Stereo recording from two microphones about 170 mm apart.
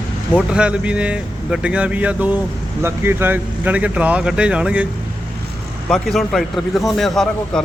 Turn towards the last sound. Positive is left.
turn(degrees=0)  # may be behind; listen again after turning